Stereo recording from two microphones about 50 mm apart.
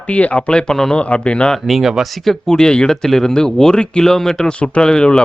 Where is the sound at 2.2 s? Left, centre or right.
Centre.